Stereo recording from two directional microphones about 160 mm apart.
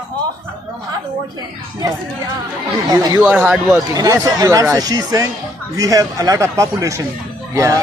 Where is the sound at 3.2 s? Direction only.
10° right (ahead or behind).